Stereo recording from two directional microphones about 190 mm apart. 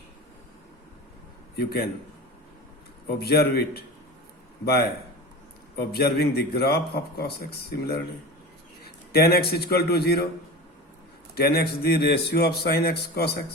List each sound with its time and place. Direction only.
1.5 s a man's voice: 55° left (ahead or behind)
3.2 s a man's voice: 55° left (ahead or behind)
9.1 s a man's voice: 55° left (ahead or behind)
11.3 s a man's voice: 55° left (ahead or behind)